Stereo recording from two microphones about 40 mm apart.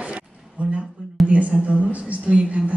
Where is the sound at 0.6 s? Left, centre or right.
Right.